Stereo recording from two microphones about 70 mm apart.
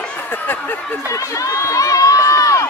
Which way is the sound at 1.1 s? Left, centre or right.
Left.